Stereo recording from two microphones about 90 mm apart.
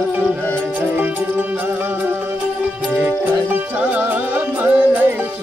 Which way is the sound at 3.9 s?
20° right (ahead or behind).